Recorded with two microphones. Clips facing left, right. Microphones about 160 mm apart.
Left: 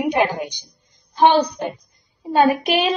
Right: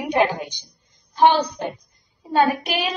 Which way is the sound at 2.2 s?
20° left (ahead or behind).